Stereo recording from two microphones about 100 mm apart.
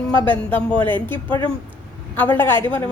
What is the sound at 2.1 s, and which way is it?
Speech, 20° left (ahead or behind).